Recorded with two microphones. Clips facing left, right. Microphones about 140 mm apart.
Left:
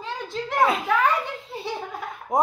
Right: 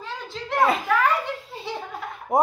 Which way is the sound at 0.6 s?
Centre (ahead or behind).